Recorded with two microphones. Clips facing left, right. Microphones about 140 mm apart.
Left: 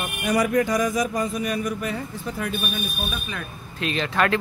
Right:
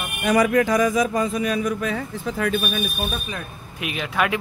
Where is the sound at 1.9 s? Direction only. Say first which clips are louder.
Right 3 dB; 90° right.